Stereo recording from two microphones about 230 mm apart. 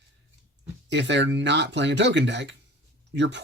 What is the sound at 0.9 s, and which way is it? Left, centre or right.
Speech, right.